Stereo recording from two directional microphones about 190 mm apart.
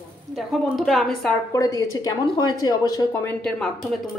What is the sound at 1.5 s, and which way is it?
Speech, 20° left (ahead or behind).